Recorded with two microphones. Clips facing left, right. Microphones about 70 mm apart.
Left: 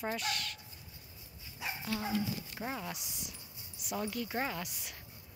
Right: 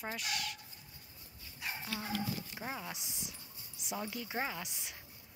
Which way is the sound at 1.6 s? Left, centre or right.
Centre.